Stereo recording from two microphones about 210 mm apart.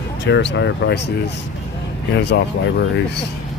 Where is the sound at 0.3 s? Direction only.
55° left (ahead or behind).